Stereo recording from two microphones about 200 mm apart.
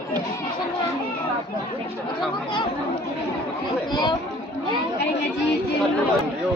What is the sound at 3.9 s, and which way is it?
Chatter, 20° left (ahead or behind).